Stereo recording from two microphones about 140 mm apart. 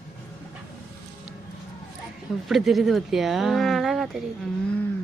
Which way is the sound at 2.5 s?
Centre (ahead or behind).